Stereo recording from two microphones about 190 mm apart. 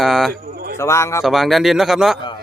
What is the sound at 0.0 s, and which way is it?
Speech, centre (ahead or behind).